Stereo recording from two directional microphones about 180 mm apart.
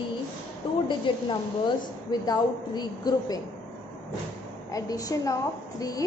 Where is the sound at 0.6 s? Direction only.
30° left (ahead or behind).